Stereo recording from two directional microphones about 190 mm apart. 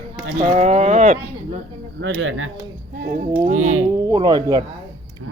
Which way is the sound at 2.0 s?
85° right.